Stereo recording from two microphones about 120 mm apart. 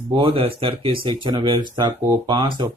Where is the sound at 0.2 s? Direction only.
50° right (ahead or behind).